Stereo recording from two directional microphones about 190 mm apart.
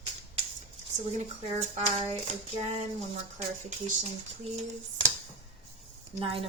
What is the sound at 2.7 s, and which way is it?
Speech, 35° right (ahead or behind).